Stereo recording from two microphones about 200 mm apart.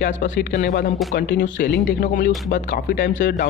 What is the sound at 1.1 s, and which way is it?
Speech, 50° left (ahead or behind).